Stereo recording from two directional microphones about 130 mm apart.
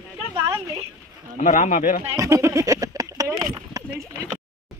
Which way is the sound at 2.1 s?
25° right (ahead or behind).